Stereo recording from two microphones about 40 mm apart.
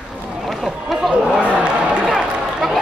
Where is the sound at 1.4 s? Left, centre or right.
Right.